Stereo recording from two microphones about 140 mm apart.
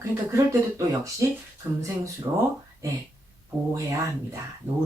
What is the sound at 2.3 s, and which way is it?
Speech, 20° right (ahead or behind).